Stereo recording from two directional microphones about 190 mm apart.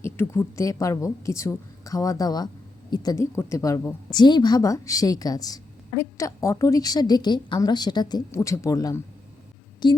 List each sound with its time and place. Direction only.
0.0 s a woman's voice: 15° left (ahead or behind)